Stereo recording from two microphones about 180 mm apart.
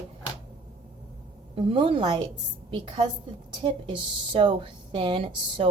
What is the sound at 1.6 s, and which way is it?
Speech, 30° right (ahead or behind).